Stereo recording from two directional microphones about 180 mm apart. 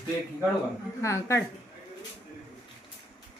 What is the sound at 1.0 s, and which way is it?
Speech, 15° left (ahead or behind).